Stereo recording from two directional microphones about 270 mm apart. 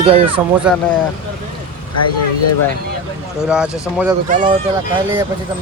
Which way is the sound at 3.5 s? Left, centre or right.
Centre.